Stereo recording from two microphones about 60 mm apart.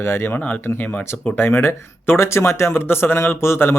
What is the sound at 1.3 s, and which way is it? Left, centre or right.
Speech, left.